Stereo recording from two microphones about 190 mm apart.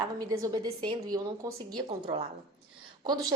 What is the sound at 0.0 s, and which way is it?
A woman's voice, 20° right (ahead or behind).